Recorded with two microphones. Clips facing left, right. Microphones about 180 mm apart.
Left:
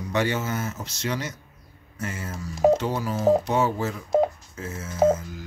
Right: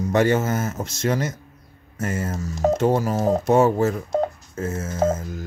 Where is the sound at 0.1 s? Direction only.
45° right (ahead or behind).